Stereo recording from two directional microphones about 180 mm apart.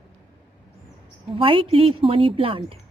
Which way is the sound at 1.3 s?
30° right (ahead or behind).